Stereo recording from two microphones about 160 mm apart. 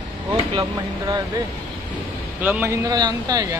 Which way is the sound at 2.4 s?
15° right (ahead or behind).